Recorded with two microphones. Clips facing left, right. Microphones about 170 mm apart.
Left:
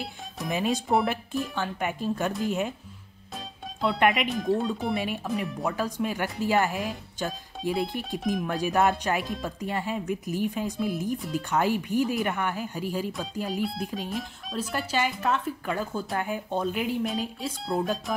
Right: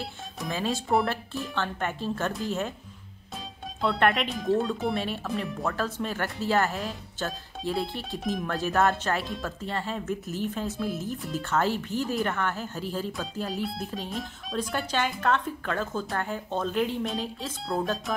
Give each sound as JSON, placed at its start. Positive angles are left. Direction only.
{"t": 0.5, "sound": "speech", "side_deg": 15}
{"t": 3.8, "sound": "speech", "side_deg": 0}
{"t": 4.9, "sound": "speech", "side_deg": 15}
{"t": 5.7, "sound": "speech", "side_deg": 15}